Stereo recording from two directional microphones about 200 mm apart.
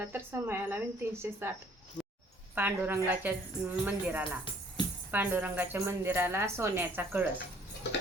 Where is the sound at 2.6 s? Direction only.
10° right (ahead or behind).